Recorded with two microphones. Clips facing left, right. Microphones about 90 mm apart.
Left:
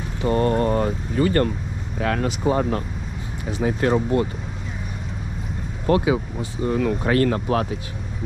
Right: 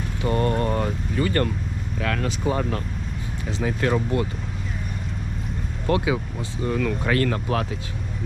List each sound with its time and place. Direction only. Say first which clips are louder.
0.3 s vehicle: left 3 dB; 30° left (ahead or behind)
2.0 s speech: left 4 dB; 35° left (ahead or behind)
5.9 s speech: left 3 dB; 35° left (ahead or behind)